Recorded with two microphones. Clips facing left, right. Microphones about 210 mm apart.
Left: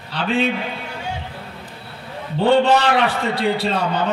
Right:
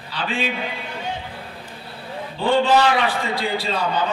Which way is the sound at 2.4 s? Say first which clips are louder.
Left 2 dB; 65° left (ahead or behind).